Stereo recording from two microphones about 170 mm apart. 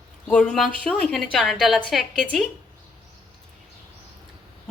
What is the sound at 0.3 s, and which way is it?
A woman's voice, 5° left (ahead or behind).